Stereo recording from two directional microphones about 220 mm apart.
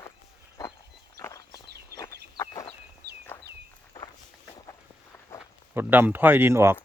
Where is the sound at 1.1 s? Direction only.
15° left (ahead or behind).